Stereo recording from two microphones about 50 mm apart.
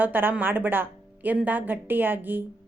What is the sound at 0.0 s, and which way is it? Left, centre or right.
A woman's voice, right.